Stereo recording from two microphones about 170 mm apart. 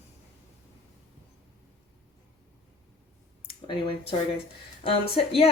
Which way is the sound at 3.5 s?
30° left (ahead or behind).